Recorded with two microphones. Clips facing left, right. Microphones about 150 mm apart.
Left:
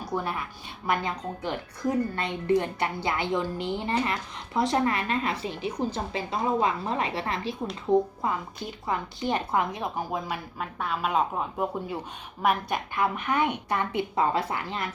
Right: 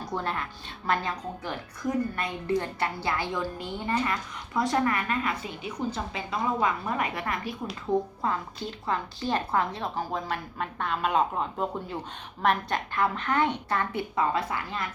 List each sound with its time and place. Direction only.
0.0 s a woman's voice: 10° left (ahead or behind)
2.6 s a woman's voice: 15° left (ahead or behind)
7.9 s a woman's voice: 15° left (ahead or behind)